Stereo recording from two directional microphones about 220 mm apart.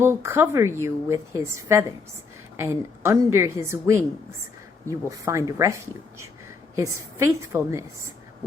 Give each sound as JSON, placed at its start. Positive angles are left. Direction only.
{"t": 0.0, "sound": "a woman's voice", "side_deg": -10}
{"t": 7.3, "sound": "a woman's voice", "side_deg": -10}